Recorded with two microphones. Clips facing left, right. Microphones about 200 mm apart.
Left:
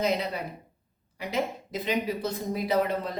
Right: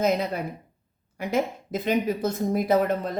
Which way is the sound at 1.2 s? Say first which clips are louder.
Right 4 dB; 50° right (ahead or behind).